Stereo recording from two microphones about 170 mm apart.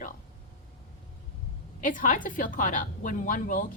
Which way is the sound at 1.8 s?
50° left (ahead or behind).